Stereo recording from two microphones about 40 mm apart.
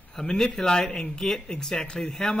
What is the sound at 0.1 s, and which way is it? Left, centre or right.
Speech, centre.